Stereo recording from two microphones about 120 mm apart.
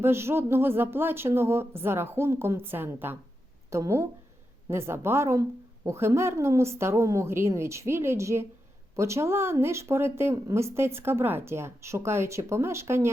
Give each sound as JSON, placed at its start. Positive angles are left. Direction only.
{"t": 0.0, "sound": "speech", "side_deg": -20}